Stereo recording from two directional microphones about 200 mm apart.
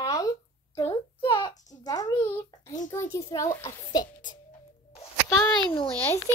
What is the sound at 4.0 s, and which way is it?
Speech, 40° left (ahead or behind).